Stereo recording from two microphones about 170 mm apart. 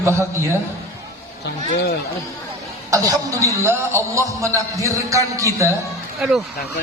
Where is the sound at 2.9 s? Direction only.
20° right (ahead or behind).